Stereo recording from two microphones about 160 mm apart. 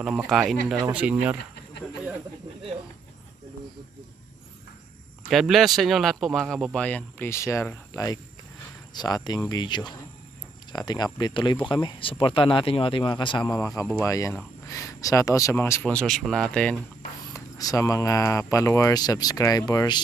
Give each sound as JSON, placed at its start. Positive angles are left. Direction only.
{"t": 0.0, "sound": "speech", "side_deg": -5}
{"t": 5.3, "sound": "speech", "side_deg": 0}
{"t": 17.3, "sound": "speech", "side_deg": 20}